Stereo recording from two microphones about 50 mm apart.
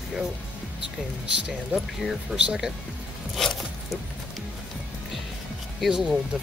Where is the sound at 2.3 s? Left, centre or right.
Centre.